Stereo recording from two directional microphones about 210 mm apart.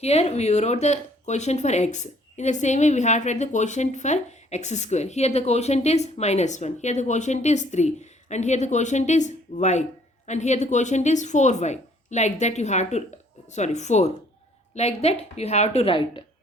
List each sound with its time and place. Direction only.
0.0 s speech: 30° left (ahead or behind)